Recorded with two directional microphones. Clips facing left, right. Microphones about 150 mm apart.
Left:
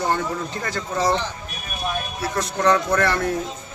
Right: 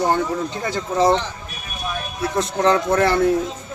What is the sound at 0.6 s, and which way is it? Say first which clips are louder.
Speech: right 5 dB; 25° right (ahead or behind).